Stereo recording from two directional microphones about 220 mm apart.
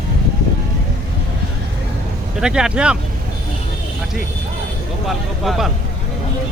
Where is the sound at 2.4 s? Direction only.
5° right (ahead or behind).